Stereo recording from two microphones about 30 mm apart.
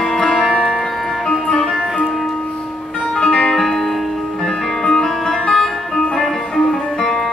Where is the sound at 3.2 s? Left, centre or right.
Left.